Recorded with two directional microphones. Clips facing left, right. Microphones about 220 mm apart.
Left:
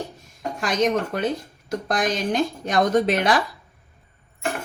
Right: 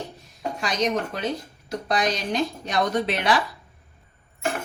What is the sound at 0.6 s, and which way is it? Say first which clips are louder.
Speech: left 4 dB; 50° left (ahead or behind).